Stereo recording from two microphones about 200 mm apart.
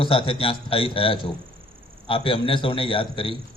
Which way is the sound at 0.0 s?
25° left (ahead or behind).